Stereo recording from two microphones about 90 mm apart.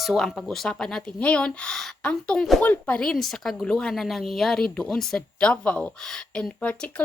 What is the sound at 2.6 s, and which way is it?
Speech, 15° left (ahead or behind).